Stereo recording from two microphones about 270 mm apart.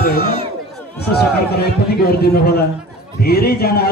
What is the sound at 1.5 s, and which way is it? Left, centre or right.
A man's voice, left.